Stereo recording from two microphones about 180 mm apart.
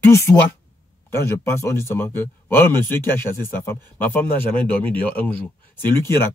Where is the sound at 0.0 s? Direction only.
15° left (ahead or behind).